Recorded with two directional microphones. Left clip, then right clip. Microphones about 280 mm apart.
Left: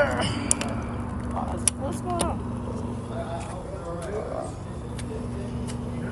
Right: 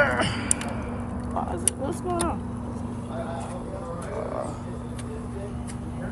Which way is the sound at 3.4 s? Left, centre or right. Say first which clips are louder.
Right 1 dB; centre.